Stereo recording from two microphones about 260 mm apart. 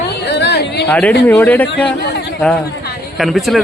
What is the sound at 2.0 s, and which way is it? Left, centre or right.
Speech, left.